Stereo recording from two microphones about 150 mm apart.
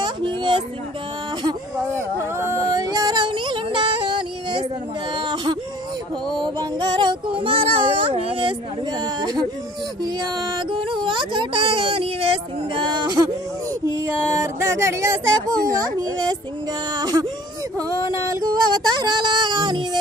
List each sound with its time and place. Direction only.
0.0 s a sound: 30° right (ahead or behind)
2.3 s music: 20° right (ahead or behind)
5.1 s whimper: 30° right (ahead or behind)
6.3 s speech: 30° right (ahead or behind)
9.0 s music: 25° right (ahead or behind)
10.7 s speech: 35° right (ahead or behind)
15.7 s music: 25° right (ahead or behind)
18.3 s music: 25° right (ahead or behind)